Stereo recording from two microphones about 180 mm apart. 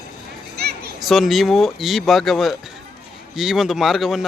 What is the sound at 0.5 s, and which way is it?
Children playing, 60° right (ahead or behind).